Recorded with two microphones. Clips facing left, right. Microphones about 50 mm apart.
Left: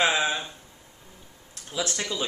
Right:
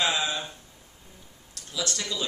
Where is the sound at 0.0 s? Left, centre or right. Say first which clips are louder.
Left 3 dB; left.